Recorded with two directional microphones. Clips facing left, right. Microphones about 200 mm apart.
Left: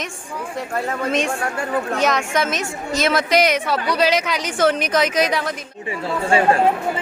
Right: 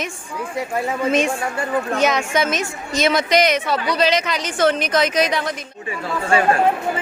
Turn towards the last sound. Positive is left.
turn(degrees=25)  # may be behind; listen again after turning